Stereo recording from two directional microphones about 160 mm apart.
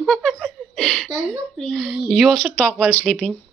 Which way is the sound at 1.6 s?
Centre (ahead or behind).